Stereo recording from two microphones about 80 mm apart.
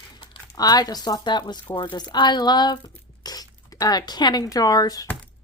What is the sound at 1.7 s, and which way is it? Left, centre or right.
Speech, left.